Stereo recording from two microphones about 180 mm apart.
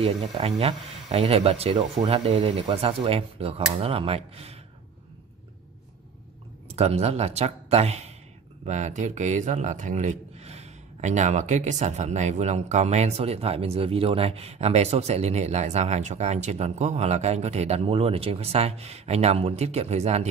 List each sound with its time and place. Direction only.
0.0 s speech: 35° right (ahead or behind)
6.7 s speech: 35° right (ahead or behind)